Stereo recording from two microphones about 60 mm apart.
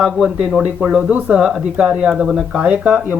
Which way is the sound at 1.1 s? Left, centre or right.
Right.